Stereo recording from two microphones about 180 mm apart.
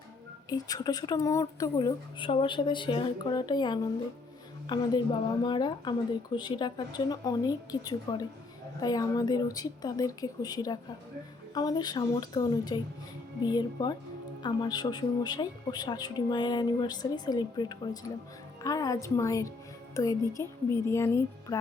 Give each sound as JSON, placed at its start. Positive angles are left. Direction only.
{"t": 0.5, "sound": "speech", "side_deg": 20}